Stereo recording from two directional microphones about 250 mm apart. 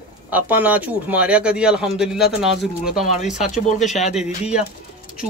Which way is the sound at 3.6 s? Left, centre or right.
Left.